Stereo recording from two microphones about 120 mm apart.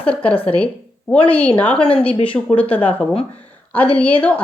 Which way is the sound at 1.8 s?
50° left (ahead or behind).